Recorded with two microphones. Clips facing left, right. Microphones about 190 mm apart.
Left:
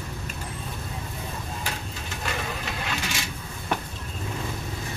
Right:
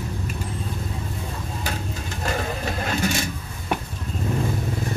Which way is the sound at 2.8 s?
40° right (ahead or behind).